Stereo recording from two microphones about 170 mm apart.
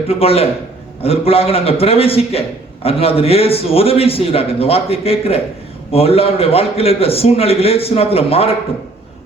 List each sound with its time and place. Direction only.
0.1 s a man's voice: 35° left (ahead or behind)